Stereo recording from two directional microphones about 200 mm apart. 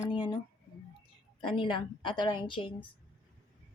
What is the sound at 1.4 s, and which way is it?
A woman's voice, 25° left (ahead or behind).